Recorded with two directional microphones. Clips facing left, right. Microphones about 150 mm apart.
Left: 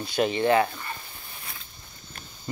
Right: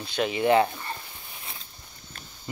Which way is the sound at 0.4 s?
20° right (ahead or behind).